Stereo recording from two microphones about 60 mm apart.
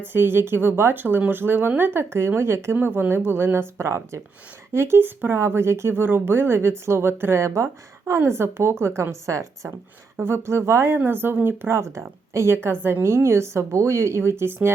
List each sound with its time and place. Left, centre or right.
0.0 s speech: right
2.8 s speech: right
8.2 s a woman's voice: right
10.2 s speech: right
12.6 s speech: right